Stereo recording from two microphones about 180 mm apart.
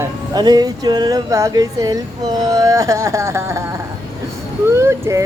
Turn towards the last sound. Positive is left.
turn(degrees=-15)  # may be behind; listen again after turning